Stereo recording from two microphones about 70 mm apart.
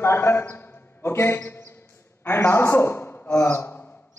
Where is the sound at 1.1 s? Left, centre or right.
Left.